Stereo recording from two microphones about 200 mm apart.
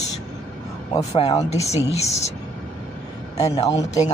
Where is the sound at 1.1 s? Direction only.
30° left (ahead or behind).